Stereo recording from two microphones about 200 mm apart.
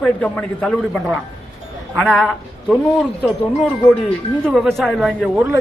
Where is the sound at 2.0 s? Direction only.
Centre (ahead or behind).